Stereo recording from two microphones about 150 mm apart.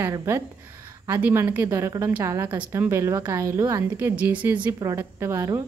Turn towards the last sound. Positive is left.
turn(degrees=-20)  # may be behind; listen again after turning